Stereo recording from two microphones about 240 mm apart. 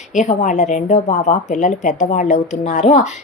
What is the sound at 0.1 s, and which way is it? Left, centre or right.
A woman's voice, left.